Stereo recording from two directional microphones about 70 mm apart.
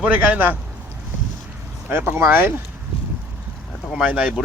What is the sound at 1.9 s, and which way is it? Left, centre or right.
Speech, right.